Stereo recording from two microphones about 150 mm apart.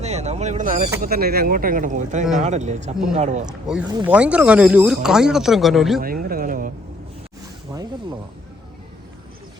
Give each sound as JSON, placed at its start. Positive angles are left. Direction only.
{"t": 0.0, "sound": "speech", "side_deg": -45}
{"t": 1.0, "sound": "speech", "side_deg": -90}
{"t": 3.7, "sound": "speech", "side_deg": -5}
{"t": 6.0, "sound": "a sound", "side_deg": -75}
{"t": 7.7, "sound": "snake", "side_deg": -25}